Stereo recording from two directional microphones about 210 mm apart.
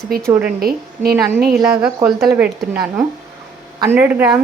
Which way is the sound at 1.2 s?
15° right (ahead or behind).